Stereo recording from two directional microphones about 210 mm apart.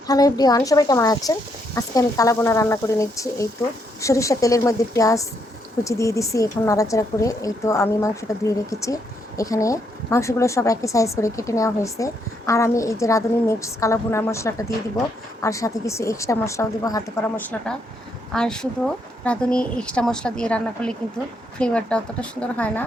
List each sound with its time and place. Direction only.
0.1 s speech: 15° left (ahead or behind)
18.3 s speech: 5° left (ahead or behind)